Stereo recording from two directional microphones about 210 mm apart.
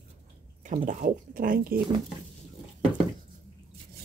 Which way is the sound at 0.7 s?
40° right (ahead or behind).